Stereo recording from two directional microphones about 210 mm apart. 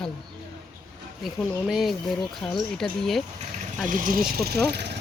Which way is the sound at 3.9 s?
40° right (ahead or behind).